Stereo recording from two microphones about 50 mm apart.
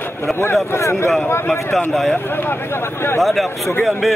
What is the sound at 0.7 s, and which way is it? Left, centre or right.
Speech, left.